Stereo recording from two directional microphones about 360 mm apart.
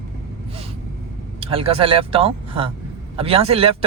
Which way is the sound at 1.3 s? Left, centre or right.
Centre.